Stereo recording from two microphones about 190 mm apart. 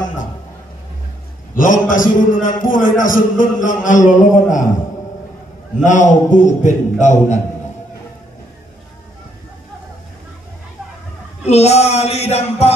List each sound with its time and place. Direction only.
1.5 s a man's voice: 45° left (ahead or behind)
5.9 s a man's voice: 40° left (ahead or behind)
11.4 s a man's voice: 35° left (ahead or behind)